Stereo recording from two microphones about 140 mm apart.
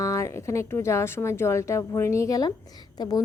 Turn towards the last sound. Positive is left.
turn(degrees=30)  # may be behind; listen again after turning